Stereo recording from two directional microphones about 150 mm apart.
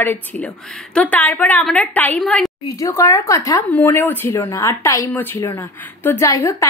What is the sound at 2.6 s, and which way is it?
A woman's voice, 20° left (ahead or behind).